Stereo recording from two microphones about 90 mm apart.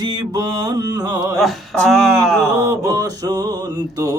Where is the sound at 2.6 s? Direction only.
40° right (ahead or behind).